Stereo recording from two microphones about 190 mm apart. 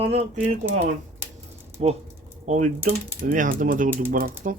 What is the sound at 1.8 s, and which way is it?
Speech, 40° right (ahead or behind).